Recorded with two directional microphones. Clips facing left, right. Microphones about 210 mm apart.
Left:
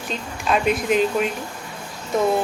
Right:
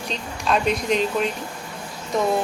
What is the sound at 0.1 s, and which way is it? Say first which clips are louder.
A woman's voice: left 1 dB; 5° left (ahead or behind).